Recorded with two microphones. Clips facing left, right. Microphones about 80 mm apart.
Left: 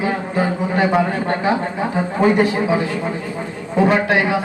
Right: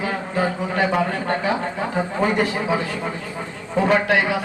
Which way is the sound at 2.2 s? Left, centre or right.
Left.